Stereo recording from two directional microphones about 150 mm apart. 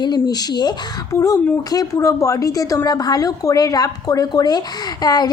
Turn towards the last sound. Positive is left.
turn(degrees=25)  # may be behind; listen again after turning